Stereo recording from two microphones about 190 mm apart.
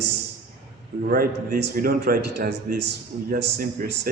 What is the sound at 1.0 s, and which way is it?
A man's voice, 50° right (ahead or behind).